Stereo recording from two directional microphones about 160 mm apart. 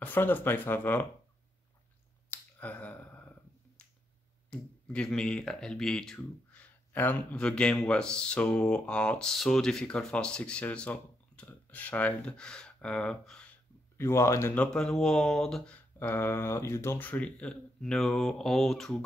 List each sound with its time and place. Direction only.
0.0 s speech: 10° left (ahead or behind)
2.3 s finger snapping: 10° left (ahead or behind)
4.5 s speech: 5° left (ahead or behind)
13.9 s speech: 15° left (ahead or behind)